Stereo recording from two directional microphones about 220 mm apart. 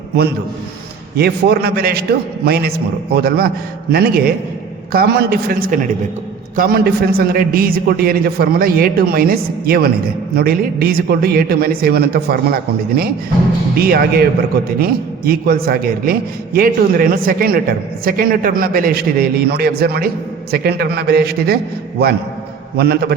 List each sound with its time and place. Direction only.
1.1 s a man's voice: 45° right (ahead or behind)
13.7 s a man's voice: 45° right (ahead or behind)